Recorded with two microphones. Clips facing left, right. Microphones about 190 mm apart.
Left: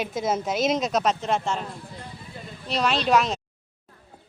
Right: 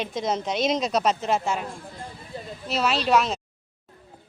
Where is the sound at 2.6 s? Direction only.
5° right (ahead or behind).